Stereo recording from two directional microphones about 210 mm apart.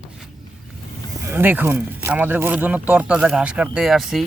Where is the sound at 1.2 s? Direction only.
10° right (ahead or behind).